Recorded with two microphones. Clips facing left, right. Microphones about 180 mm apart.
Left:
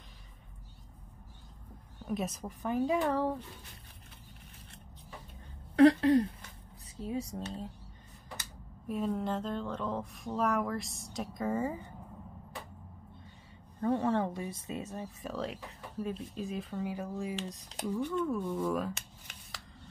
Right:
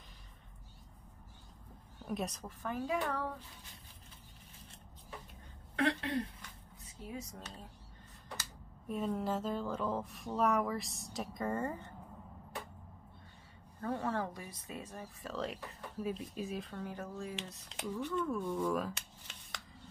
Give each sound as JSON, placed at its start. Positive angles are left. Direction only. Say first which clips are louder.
{"t": 2.0, "sound": "speech", "louder": "left 4 dB", "side_deg": 5}
{"t": 5.8, "sound": "a sound", "louder": "left 12 dB", "side_deg": 40}
{"t": 7.0, "sound": "speech", "louder": "left 9 dB", "side_deg": 30}
{"t": 8.8, "sound": "speech", "louder": "left 3 dB", "side_deg": 0}
{"t": 13.7, "sound": "speech", "louder": "left 7 dB", "side_deg": 25}
{"t": 15.3, "sound": "speech", "louder": "even", "side_deg": 0}